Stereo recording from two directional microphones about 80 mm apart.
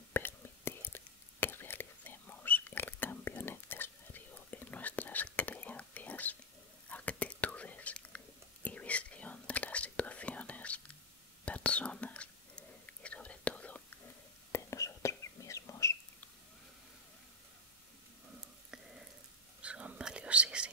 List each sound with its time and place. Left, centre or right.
0.1 s whispering: left
14.5 s whispering: left
19.6 s whispering: centre